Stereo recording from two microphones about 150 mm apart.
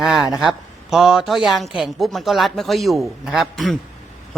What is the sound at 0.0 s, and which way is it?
A man's voice, 5° right (ahead or behind).